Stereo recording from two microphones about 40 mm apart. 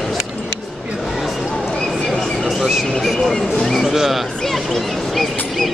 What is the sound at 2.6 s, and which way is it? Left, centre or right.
Speech, centre.